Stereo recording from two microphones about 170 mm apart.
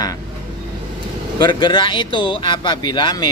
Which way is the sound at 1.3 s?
25° left (ahead or behind).